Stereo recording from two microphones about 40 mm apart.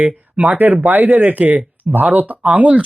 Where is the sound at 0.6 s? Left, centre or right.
Right.